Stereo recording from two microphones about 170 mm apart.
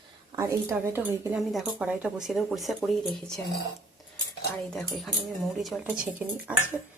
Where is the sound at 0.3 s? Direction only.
15° right (ahead or behind).